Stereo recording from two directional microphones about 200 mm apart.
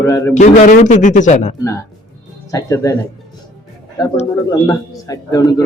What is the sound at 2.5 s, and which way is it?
Speech, 15° left (ahead or behind).